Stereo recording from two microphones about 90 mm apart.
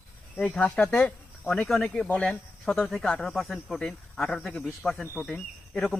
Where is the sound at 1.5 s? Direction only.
5° left (ahead or behind).